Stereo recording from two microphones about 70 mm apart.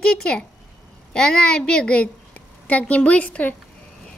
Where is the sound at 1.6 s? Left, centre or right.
Centre.